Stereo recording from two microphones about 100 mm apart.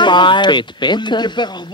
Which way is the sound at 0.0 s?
50° left (ahead or behind).